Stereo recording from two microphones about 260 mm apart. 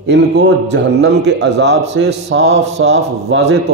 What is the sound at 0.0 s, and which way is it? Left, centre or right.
A man's voice, right.